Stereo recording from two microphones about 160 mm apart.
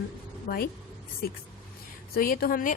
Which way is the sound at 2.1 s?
65° left (ahead or behind).